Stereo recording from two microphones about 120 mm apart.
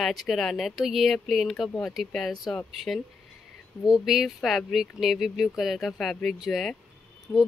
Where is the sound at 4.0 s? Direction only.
Centre (ahead or behind).